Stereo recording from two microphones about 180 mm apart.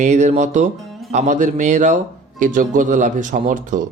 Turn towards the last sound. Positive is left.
turn(degrees=-45)  # may be behind; listen again after turning